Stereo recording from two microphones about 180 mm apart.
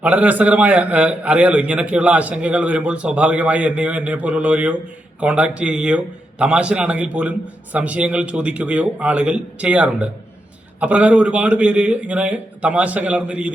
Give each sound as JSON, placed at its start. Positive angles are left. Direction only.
{"t": 0.0, "sound": "a man's voice", "side_deg": -10}